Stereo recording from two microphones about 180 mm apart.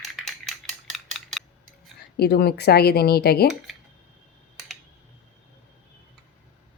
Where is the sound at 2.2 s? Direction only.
60° left (ahead or behind).